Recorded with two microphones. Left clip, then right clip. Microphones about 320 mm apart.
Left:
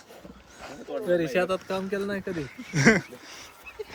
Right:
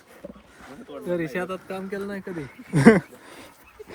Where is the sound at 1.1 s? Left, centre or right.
Centre.